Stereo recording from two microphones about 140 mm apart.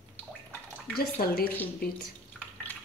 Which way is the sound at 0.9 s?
90° left.